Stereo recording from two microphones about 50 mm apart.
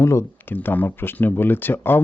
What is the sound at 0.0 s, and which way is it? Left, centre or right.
Speech, left.